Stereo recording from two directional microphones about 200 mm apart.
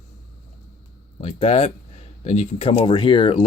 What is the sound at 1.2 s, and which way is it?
Speech, 30° left (ahead or behind).